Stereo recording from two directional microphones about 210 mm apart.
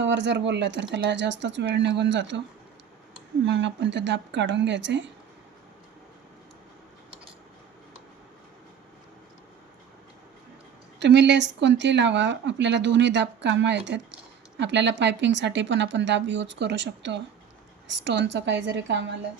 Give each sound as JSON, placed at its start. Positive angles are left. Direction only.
{"t": 0.0, "sound": "speech", "side_deg": -55}
{"t": 3.4, "sound": "speech", "side_deg": -60}
{"t": 11.0, "sound": "speech", "side_deg": -55}